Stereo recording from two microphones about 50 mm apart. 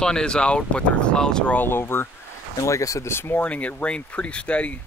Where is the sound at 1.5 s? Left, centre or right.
Left.